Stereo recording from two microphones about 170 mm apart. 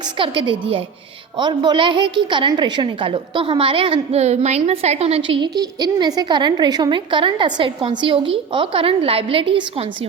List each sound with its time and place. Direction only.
0.2 s a woman's voice: 30° right (ahead or behind)